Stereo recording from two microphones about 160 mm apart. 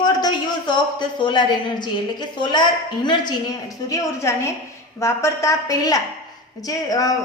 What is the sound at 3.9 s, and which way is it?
A woman's voice, 20° left (ahead or behind).